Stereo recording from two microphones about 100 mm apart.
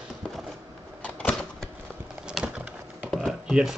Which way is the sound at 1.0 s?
15° left (ahead or behind).